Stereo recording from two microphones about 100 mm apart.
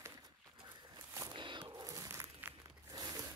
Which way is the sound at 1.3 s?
50° right (ahead or behind).